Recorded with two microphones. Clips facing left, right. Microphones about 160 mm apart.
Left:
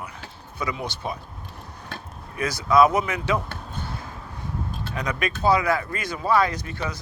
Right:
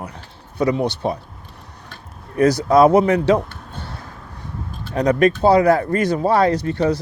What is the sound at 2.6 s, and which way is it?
Speech, 35° right (ahead or behind).